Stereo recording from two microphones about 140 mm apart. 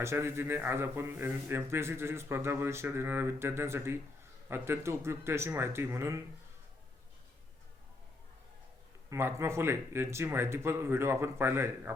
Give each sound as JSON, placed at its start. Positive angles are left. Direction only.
{"t": 0.0, "sound": "a man's voice", "side_deg": -20}
{"t": 9.0, "sound": "a man's voice", "side_deg": -20}